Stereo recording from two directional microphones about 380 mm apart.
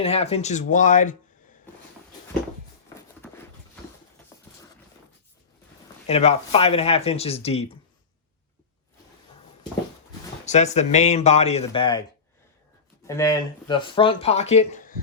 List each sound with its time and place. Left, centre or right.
0.0 s speech: centre
6.1 s speech: centre
10.4 s speech: centre
13.1 s speech: centre